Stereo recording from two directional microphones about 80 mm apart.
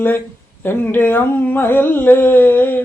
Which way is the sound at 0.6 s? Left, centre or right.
Left.